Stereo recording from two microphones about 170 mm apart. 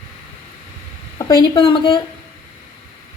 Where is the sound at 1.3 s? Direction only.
25° left (ahead or behind).